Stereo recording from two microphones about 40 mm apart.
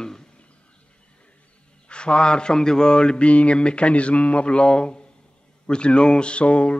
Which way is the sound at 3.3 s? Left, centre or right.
Left.